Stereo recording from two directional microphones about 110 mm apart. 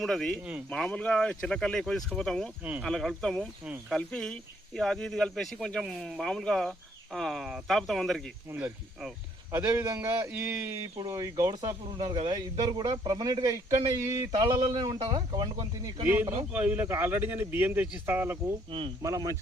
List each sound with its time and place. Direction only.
0.0 s speech: 5° left (ahead or behind)
9.5 s speech: 20° right (ahead or behind)
11.1 s speech: 35° right (ahead or behind)
14.3 s speech: 40° right (ahead or behind)
16.5 s speech: 15° right (ahead or behind)
19.0 s speech: 30° right (ahead or behind)